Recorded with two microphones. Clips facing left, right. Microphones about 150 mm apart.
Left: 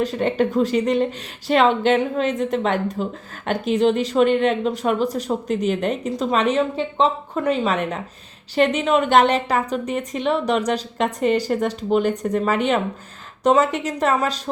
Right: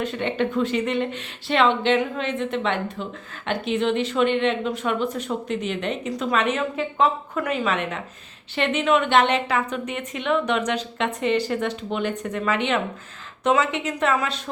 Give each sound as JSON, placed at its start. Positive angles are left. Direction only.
{"t": 0.0, "sound": "speech", "side_deg": 40}